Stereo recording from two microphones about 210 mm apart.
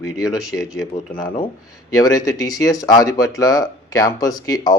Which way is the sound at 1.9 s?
15° left (ahead or behind).